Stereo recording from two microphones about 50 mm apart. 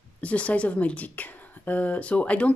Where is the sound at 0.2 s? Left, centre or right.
Left.